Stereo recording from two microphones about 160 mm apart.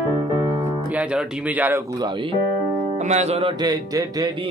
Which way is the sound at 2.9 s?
45° right (ahead or behind).